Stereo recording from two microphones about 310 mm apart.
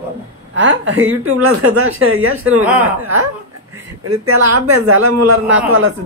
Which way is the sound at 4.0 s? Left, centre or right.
Right.